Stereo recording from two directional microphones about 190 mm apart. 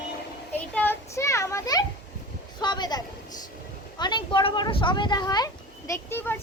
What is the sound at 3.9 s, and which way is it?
A child's voice, 25° left (ahead or behind).